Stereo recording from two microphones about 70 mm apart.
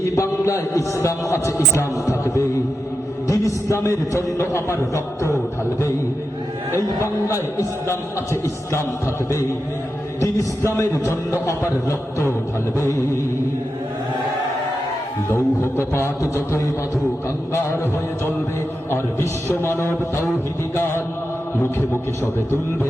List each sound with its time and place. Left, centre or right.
0.0 s a man's voice: left
3.2 s a sound: left
4.4 s music: left
6.7 s a man's voice: left
7.9 s music: left
10.7 s a man's voice: left
15.3 s music: left
19.6 s music: left